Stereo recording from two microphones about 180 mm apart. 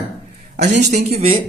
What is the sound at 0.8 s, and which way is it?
Speech, 40° right (ahead or behind).